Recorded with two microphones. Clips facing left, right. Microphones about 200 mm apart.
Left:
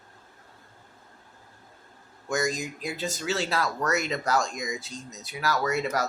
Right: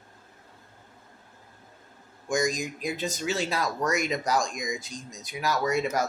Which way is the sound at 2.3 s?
15° right (ahead or behind).